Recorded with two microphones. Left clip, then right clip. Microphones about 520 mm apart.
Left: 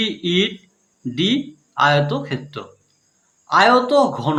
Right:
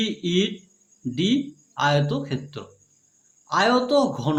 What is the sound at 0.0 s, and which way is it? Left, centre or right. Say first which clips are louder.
Speech: left 5 dB; right.